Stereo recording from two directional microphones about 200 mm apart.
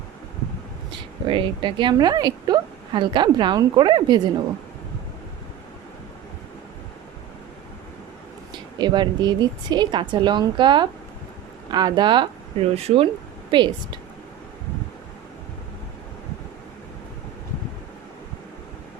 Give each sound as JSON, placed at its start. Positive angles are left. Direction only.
{"t": 1.3, "sound": "a woman's voice", "side_deg": -25}
{"t": 8.8, "sound": "a woman's voice", "side_deg": -20}